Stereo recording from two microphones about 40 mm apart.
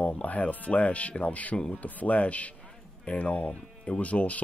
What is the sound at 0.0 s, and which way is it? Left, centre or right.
Speech, left.